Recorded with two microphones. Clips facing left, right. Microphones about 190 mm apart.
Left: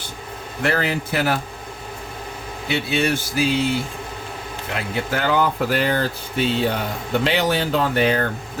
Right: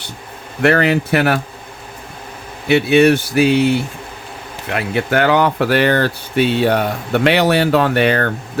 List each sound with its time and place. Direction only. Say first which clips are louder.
0.6 s speech: right 8 dB; 65° right (ahead or behind)
2.6 s speech: right 10 dB; 65° right (ahead or behind)